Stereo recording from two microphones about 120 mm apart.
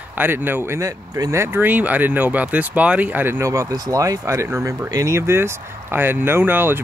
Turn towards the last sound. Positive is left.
turn(degrees=-15)  # may be behind; listen again after turning